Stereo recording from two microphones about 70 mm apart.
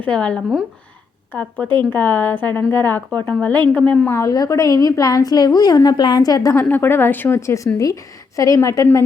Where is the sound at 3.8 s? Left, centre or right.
Centre.